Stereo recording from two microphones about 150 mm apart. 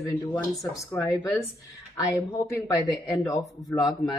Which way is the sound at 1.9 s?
20° left (ahead or behind).